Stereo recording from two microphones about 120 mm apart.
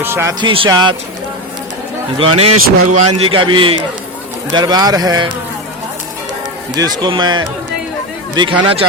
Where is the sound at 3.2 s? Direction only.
45° right (ahead or behind).